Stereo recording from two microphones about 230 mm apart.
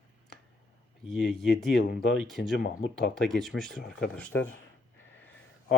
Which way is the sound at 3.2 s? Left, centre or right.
Centre.